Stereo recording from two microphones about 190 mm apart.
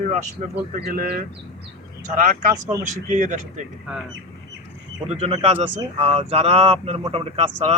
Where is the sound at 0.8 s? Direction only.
50° right (ahead or behind).